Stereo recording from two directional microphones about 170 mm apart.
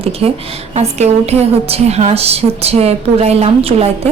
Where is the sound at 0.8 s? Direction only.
40° right (ahead or behind).